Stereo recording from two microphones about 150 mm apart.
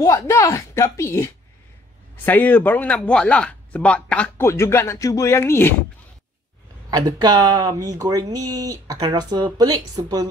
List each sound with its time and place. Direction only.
0.0 s speech: 20° left (ahead or behind)
6.9 s speech: 25° right (ahead or behind)